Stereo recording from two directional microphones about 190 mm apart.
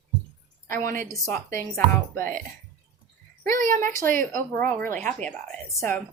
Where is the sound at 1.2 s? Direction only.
15° left (ahead or behind).